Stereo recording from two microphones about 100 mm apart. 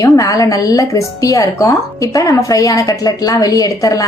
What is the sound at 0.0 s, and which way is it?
Speech, 35° left (ahead or behind).